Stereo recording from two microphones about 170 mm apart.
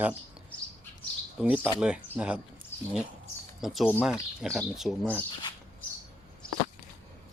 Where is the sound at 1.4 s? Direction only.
10° right (ahead or behind).